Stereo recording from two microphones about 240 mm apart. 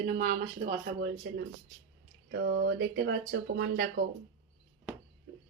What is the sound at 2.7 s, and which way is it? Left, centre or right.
Speech, right.